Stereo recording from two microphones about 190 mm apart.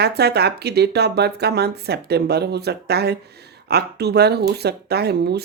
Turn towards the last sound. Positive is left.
turn(degrees=-60)  # may be behind; listen again after turning